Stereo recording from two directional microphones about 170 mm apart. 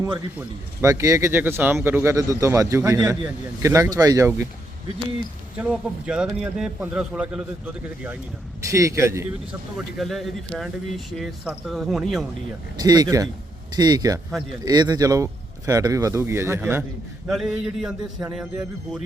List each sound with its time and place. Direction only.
0.3 s speech: 15° right (ahead or behind)
5.5 s speech: 5° right (ahead or behind)
9.7 s speech: centre (ahead or behind)
12.7 s speech: 25° right (ahead or behind)
17.2 s speech: centre (ahead or behind)